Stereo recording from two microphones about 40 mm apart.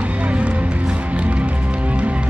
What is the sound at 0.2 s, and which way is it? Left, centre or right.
Music, right.